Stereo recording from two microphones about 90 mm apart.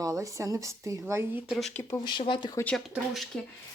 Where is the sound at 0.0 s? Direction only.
35° right (ahead or behind).